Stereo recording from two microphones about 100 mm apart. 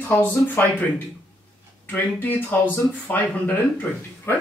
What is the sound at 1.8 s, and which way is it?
Speech, 15° left (ahead or behind).